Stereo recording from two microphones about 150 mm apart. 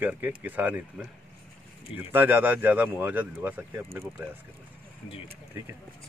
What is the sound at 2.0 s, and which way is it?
Speech, 15° right (ahead or behind).